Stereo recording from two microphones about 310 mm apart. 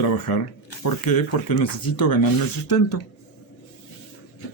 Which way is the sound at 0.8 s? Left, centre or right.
Left.